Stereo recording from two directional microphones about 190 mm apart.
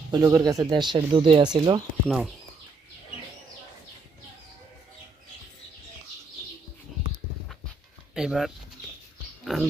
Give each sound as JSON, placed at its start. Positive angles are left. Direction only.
{"t": 0.1, "sound": "speech", "side_deg": -15}
{"t": 2.0, "sound": "speech", "side_deg": 0}
{"t": 8.1, "sound": "speech", "side_deg": -5}
{"t": 9.4, "sound": "a sound", "side_deg": 0}